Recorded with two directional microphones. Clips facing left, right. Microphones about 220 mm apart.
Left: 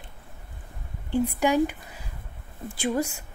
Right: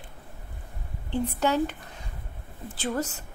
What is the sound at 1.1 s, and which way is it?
A woman's voice, 10° left (ahead or behind).